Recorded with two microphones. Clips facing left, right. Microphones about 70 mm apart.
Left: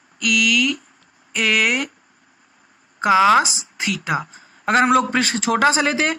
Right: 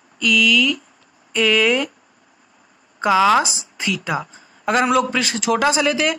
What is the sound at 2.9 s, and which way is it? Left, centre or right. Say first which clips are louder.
A woman's voice: left 1 dB; left.